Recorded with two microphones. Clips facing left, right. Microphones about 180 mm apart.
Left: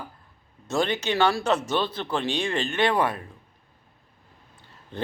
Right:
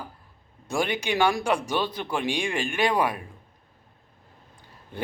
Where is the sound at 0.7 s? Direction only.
10° right (ahead or behind).